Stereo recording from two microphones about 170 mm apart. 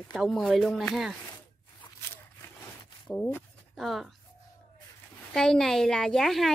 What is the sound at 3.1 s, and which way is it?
Speech, 10° left (ahead or behind).